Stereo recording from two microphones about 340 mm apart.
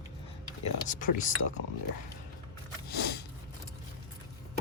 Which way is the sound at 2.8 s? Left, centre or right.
Left.